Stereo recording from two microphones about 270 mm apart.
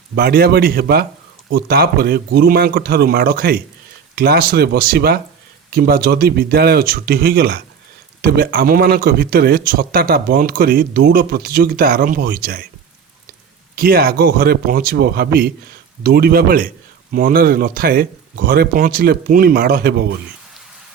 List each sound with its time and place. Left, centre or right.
0.2 s speech: right
13.7 s speech: right